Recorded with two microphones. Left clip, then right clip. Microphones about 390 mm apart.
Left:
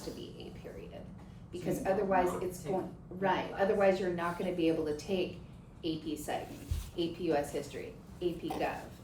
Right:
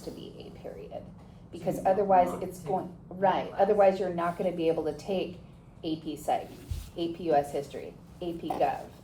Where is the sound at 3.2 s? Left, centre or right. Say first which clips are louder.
Right 6 dB; right.